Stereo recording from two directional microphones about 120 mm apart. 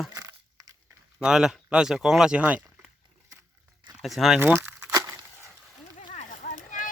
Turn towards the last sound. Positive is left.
turn(degrees=90)